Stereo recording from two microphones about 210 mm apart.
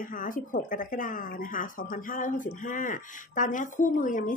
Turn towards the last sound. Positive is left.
turn(degrees=40)  # may be behind; listen again after turning